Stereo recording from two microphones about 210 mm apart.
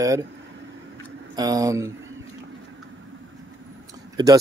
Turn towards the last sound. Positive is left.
turn(degrees=-15)  # may be behind; listen again after turning